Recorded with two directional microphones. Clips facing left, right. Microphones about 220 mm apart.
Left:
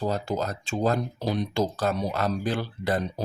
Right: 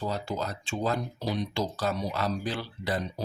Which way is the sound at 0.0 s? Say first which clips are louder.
Left 4 dB; 45° left (ahead or behind).